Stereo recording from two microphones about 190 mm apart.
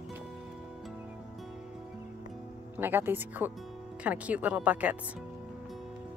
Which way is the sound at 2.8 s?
10° right (ahead or behind).